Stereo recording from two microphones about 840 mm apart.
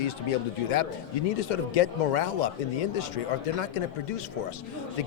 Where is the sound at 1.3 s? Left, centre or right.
Left.